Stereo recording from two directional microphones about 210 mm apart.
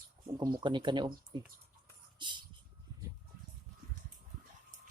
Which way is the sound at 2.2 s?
20° right (ahead or behind).